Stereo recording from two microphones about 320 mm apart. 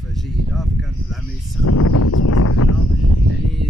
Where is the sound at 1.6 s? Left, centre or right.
Left.